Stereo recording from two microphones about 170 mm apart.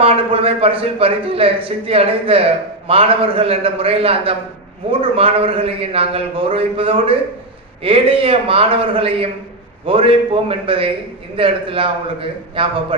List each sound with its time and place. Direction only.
0.0 s a man's voice: 35° right (ahead or behind)